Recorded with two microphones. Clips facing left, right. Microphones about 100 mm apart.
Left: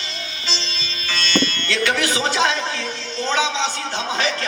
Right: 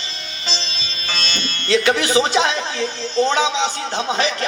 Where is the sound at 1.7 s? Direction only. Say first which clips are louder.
Right 7 dB; 25° right (ahead or behind).